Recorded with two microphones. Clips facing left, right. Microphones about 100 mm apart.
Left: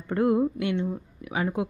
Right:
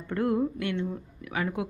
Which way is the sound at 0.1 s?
20° left (ahead or behind).